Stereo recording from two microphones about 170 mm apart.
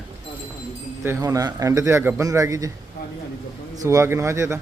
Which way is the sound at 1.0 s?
15° right (ahead or behind).